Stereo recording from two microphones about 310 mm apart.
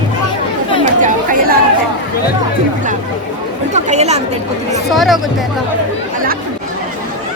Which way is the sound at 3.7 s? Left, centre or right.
Right.